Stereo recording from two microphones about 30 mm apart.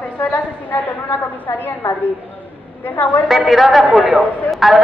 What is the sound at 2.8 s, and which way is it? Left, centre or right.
Speech, left.